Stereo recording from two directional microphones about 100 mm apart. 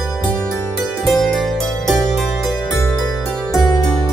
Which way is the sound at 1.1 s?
5° left (ahead or behind).